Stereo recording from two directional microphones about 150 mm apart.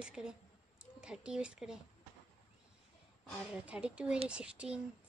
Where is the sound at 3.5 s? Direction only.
5° right (ahead or behind).